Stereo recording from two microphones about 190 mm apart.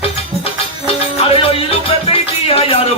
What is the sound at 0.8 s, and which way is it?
Music, 30° left (ahead or behind).